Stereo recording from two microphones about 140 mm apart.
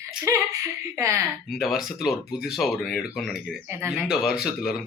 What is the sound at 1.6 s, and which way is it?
A man's voice, centre (ahead or behind).